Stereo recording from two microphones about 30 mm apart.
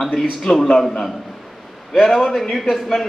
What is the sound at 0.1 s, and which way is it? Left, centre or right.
Speech, centre.